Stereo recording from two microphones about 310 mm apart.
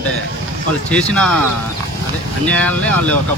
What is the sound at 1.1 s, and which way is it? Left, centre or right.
Speech, centre.